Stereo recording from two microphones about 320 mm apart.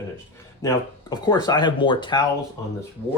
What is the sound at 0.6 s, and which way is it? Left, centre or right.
Speech, centre.